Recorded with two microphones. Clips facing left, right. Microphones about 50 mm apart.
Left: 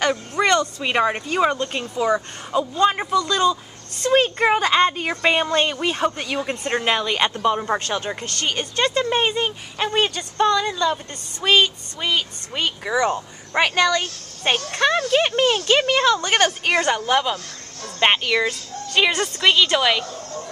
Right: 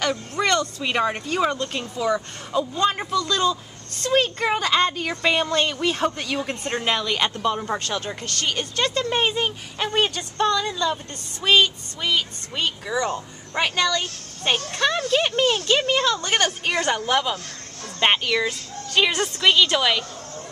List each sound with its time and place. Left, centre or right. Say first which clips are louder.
0.0 s a sound: left 3 dB; centre
0.6 s a woman's voice: left 3 dB; centre
4.0 s a woman's voice: left 4 dB; centre